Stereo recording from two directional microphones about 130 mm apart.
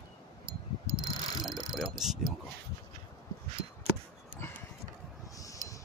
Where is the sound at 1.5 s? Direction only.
5° right (ahead or behind).